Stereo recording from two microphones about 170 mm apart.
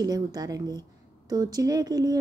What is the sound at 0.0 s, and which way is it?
Speech, 25° right (ahead or behind).